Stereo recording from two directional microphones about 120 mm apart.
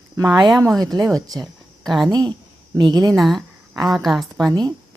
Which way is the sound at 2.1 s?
35° right (ahead or behind).